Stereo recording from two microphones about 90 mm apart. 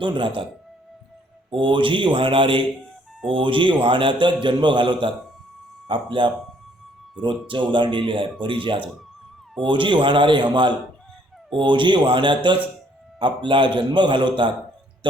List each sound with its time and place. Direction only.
0.0 s speech: 65° right (ahead or behind)
1.6 s a man's voice: 65° right (ahead or behind)